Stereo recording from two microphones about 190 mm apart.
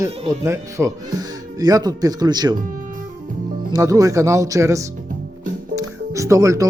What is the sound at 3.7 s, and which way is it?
Speech, 20° right (ahead or behind).